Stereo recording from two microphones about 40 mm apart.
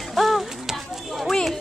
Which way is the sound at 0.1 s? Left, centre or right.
Centre.